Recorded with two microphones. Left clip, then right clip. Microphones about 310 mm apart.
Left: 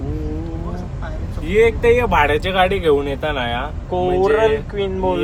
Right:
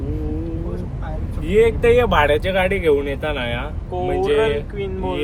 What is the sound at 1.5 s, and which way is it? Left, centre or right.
Speech, centre.